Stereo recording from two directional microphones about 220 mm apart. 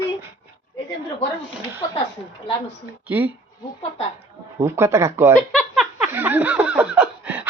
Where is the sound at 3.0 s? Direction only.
10° right (ahead or behind).